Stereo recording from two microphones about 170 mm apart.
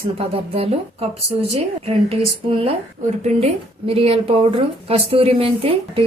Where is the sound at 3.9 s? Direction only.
35° right (ahead or behind).